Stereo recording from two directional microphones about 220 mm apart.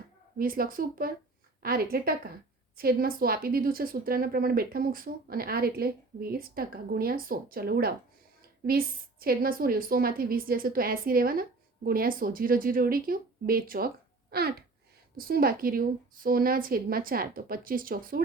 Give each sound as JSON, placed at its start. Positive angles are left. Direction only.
{"t": 0.3, "sound": "a woman's voice", "side_deg": -40}
{"t": 9.2, "sound": "a woman's voice", "side_deg": -40}